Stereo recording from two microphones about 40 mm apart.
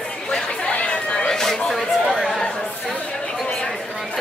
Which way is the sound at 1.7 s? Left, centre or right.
Centre.